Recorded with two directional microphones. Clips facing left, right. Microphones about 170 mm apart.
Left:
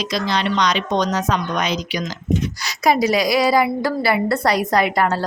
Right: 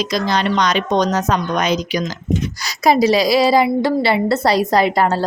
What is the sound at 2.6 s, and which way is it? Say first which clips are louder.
A woman's voice: right 5 dB; 30° right (ahead or behind).